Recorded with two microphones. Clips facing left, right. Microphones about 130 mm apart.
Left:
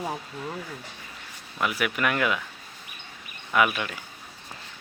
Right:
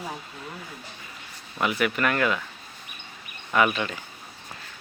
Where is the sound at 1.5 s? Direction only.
Centre (ahead or behind).